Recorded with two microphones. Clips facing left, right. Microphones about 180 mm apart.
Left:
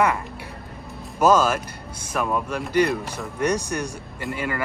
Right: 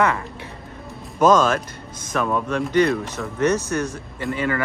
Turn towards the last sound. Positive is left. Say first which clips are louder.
# right 4 dB
turn(degrees=5)  # may be behind; listen again after turning